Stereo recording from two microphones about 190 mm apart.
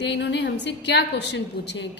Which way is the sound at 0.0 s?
65° left (ahead or behind).